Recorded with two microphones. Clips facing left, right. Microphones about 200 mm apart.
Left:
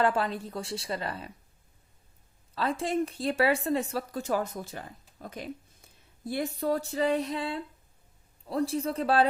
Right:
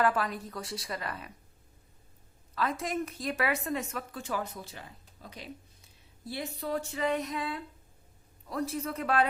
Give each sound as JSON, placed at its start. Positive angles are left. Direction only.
{"t": 0.0, "sound": "a woman's voice", "side_deg": 25}
{"t": 2.6, "sound": "speech", "side_deg": 30}